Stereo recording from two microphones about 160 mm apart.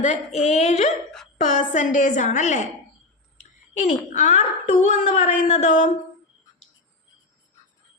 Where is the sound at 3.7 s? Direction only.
50° left (ahead or behind).